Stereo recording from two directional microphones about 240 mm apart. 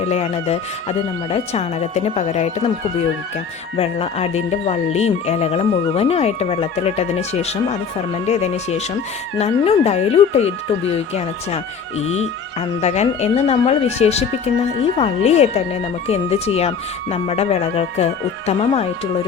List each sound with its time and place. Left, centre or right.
0.0 s speech: left
3.8 s speech: left